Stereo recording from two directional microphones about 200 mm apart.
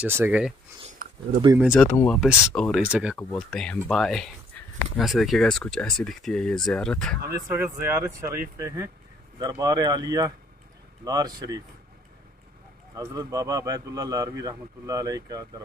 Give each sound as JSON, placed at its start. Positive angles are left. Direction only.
{"t": 0.0, "sound": "a man's voice", "side_deg": -10}
{"t": 0.8, "sound": "a sound", "side_deg": -40}
{"t": 1.6, "sound": "speech", "side_deg": 0}
{"t": 1.9, "sound": "speech", "side_deg": 10}
{"t": 3.2, "sound": "speech", "side_deg": 5}
{"t": 7.4, "sound": "a man's voice", "side_deg": -10}
{"t": 12.9, "sound": "a man's voice", "side_deg": -15}